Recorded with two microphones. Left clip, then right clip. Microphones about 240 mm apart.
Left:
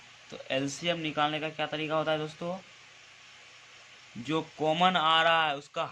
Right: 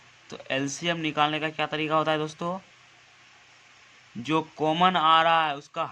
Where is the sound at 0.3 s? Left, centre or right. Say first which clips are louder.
Right 3 dB; right.